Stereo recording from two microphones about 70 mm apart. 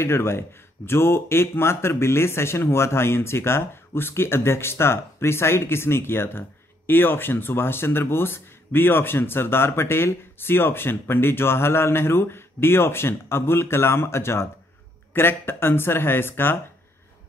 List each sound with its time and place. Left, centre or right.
0.0 s speech: left